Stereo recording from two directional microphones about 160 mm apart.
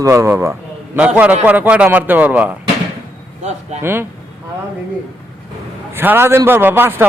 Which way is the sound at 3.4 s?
45° right (ahead or behind).